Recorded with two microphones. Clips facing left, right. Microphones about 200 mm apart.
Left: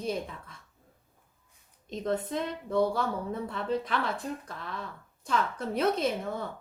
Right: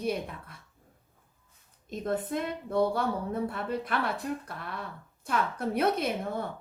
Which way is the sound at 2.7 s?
55° right (ahead or behind).